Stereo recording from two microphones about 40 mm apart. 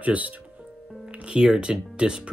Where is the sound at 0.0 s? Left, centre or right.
Right.